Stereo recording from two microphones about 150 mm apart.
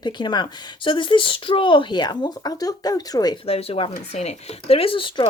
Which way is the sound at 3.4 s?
40° left (ahead or behind).